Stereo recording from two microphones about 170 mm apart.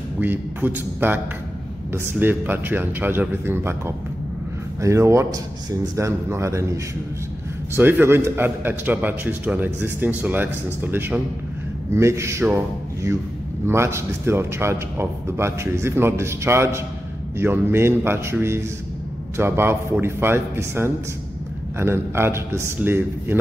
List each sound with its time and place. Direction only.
0.2 s a man's voice: 10° right (ahead or behind)